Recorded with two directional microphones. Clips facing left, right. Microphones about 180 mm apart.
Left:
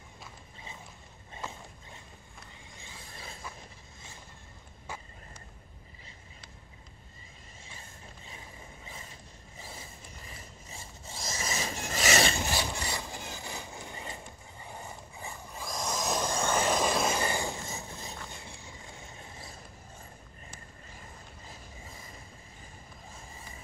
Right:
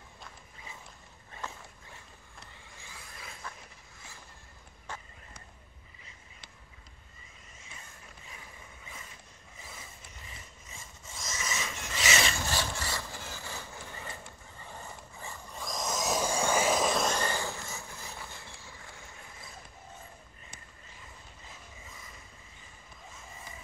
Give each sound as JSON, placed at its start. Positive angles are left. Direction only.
{"t": 1.3, "sound": "a sound", "side_deg": 20}
{"t": 2.7, "sound": "mechanisms", "side_deg": 25}
{"t": 7.6, "sound": "mechanisms", "side_deg": 30}
{"t": 12.4, "sound": "wood", "side_deg": 15}
{"t": 18.3, "sound": "vehicle", "side_deg": 15}
{"t": 20.9, "sound": "mechanisms", "side_deg": 40}